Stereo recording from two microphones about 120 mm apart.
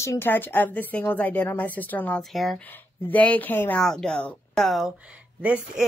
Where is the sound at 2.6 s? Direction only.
15° left (ahead or behind).